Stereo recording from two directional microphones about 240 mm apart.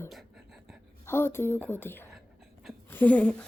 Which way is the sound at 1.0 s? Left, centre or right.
Centre.